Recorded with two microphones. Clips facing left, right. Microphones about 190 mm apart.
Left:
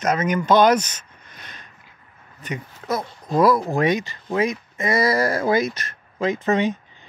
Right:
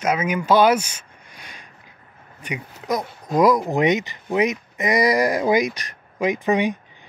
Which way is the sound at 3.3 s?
15° right (ahead or behind).